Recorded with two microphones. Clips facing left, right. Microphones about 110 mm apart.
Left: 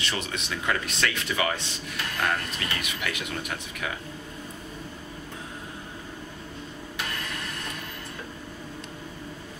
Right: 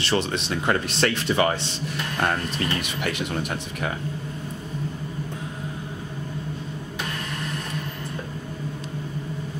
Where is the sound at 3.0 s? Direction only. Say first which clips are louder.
Right 6 dB; 35° right (ahead or behind).